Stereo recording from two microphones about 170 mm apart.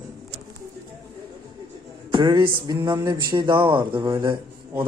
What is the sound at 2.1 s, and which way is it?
Speech, 30° right (ahead or behind).